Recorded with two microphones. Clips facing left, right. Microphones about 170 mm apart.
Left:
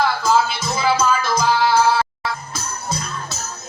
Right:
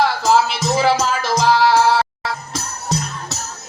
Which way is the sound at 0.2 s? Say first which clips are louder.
Right 2 dB; 75° right (ahead or behind).